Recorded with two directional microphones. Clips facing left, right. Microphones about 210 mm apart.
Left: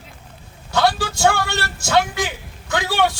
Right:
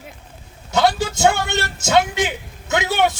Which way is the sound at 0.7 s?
20° right (ahead or behind).